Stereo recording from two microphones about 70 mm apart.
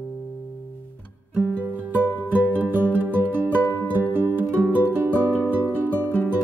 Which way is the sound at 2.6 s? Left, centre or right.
Right.